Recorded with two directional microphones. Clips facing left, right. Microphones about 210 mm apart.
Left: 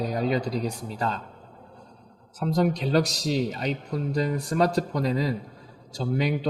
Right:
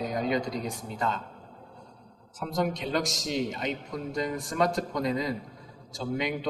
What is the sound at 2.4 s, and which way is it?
Speech, 35° left (ahead or behind).